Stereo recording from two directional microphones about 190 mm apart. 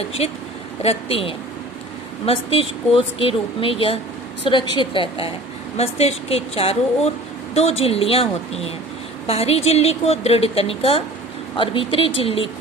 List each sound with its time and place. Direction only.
0.8 s a woman's voice: 30° left (ahead or behind)